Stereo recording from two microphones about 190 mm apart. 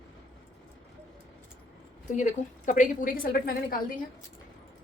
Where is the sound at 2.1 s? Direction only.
40° left (ahead or behind).